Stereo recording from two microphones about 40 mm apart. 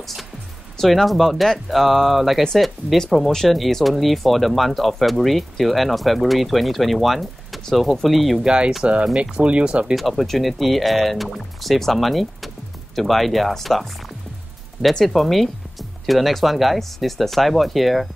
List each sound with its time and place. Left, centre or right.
0.7 s speech: centre
8.5 s speech: right
9.9 s speech: centre
15.0 s speech: centre